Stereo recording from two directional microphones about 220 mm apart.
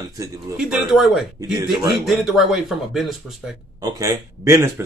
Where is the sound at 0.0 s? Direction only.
15° right (ahead or behind).